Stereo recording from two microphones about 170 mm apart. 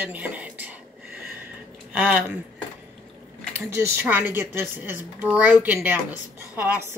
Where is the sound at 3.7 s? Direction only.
15° right (ahead or behind).